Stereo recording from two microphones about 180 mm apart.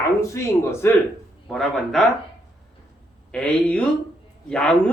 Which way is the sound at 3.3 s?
5° left (ahead or behind).